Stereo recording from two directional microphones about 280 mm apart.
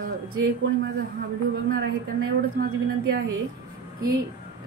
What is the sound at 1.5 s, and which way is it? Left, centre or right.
Speech, right.